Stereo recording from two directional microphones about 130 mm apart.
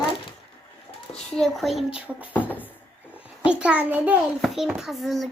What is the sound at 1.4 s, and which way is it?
Speech, centre (ahead or behind).